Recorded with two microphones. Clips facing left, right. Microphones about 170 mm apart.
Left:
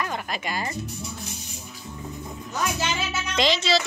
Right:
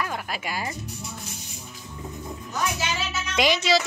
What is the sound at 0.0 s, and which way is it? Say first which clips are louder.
Speech: left 1 dB; 5° right (ahead or behind).